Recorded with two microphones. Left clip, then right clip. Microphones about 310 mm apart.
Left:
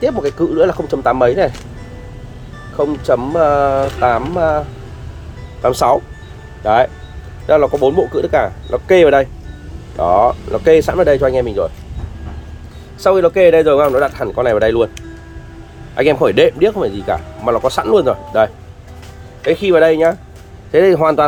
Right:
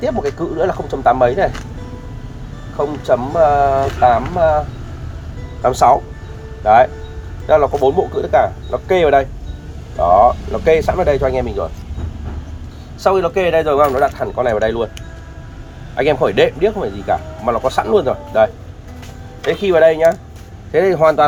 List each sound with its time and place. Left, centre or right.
0.0 s speech: left
2.7 s speech: left
7.4 s speech: left
13.0 s speech: left
16.2 s speech: left